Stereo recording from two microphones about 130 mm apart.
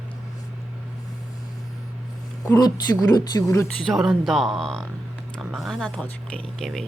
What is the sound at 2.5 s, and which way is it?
Speech, 30° left (ahead or behind).